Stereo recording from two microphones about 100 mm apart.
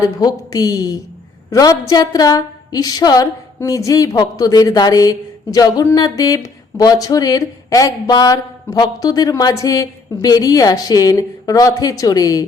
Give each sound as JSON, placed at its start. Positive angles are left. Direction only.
{"t": 0.0, "sound": "speech", "side_deg": 40}